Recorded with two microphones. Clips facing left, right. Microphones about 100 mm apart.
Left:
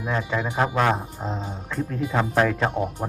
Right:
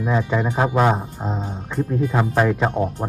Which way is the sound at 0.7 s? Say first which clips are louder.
Right 4 dB; 20° right (ahead or behind).